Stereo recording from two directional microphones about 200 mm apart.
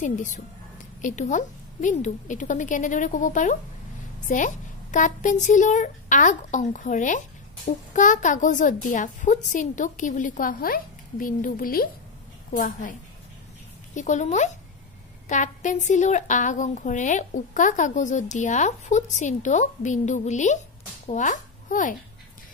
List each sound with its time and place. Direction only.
0.0 s a woman's voice: 40° left (ahead or behind)
13.9 s a woman's voice: 35° left (ahead or behind)